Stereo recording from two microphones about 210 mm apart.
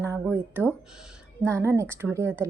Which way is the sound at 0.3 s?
10° right (ahead or behind).